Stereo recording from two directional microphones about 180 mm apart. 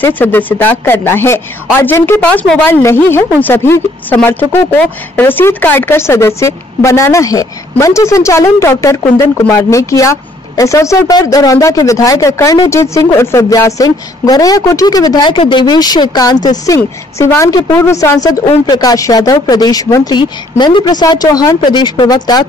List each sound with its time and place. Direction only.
0.0 s a woman's voice: 10° left (ahead or behind)